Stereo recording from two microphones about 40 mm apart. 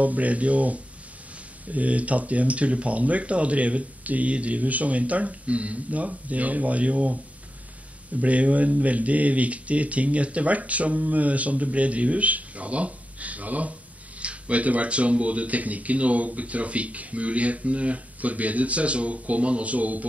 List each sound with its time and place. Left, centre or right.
0.0 s speech: right
8.2 s speech: right